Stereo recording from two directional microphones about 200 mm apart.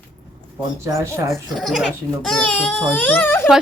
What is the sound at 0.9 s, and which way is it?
Speech, 15° right (ahead or behind).